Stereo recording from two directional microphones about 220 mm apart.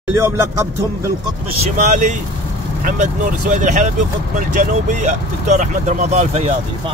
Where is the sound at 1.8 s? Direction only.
35° right (ahead or behind).